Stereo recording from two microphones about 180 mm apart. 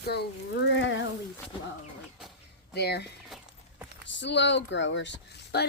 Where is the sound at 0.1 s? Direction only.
65° left (ahead or behind); by 1.0 s 90° left.